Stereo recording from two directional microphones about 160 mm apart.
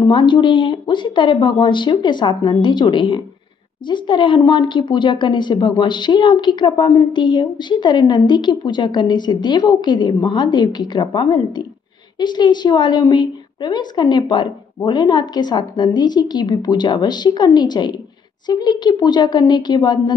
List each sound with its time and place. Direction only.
0.0 s a woman's voice: 30° left (ahead or behind)